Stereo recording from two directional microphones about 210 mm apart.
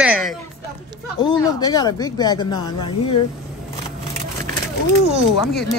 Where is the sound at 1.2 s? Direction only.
20° left (ahead or behind).